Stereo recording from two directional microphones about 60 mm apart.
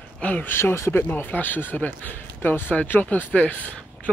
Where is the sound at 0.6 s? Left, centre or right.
Left.